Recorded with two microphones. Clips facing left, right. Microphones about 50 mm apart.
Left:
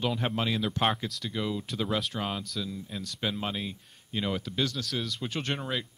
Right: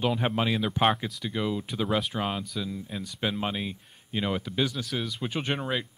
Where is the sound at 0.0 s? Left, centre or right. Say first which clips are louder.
Right 3 dB; centre.